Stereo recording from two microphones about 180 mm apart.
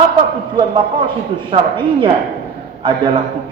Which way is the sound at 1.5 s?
25° right (ahead or behind).